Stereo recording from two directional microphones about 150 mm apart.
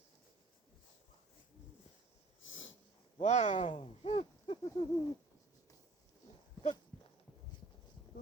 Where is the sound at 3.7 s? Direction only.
40° left (ahead or behind).